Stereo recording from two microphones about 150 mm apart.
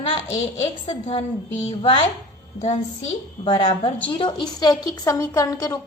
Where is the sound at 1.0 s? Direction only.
45° left (ahead or behind).